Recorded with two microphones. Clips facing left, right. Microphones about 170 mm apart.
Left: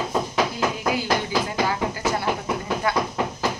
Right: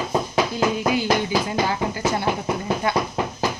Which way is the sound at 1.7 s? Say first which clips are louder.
Right 1 dB; 25° right (ahead or behind).